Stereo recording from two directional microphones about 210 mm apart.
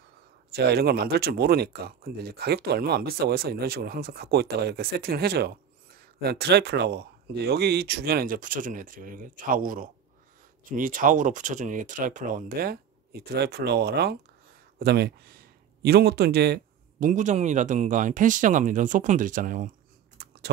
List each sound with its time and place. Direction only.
0.5 s speech: 50° right (ahead or behind)
17.1 s speech: 35° right (ahead or behind)